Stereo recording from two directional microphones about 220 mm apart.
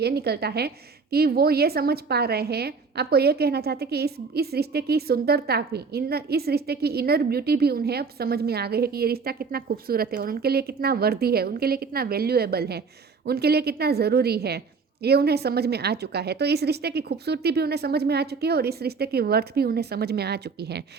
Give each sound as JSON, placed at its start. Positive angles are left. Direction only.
{"t": 0.0, "sound": "a woman's voice", "side_deg": -45}